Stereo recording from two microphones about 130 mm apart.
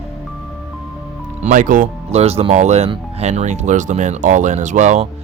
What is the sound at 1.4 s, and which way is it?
Speech, 85° right.